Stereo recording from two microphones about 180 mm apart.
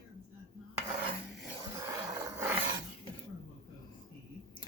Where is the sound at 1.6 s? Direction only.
20° right (ahead or behind).